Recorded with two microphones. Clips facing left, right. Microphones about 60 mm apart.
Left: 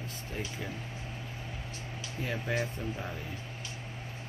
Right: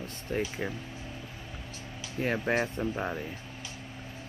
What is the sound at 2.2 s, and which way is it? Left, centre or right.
Speech, right.